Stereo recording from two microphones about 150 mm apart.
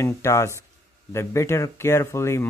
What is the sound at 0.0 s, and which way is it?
Speech, 20° left (ahead or behind).